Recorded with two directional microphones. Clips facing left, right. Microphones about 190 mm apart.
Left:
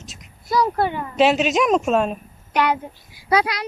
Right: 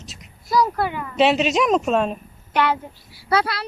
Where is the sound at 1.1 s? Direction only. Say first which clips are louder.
Even; centre (ahead or behind).